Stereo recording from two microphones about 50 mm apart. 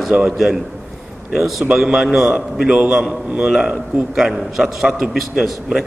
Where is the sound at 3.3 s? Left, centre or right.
Centre.